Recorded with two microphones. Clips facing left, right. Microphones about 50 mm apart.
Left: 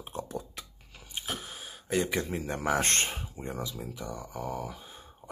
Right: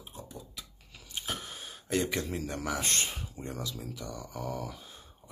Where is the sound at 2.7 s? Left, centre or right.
Left.